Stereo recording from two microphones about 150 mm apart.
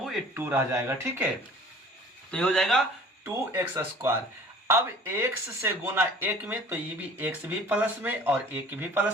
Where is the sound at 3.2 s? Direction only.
15° right (ahead or behind).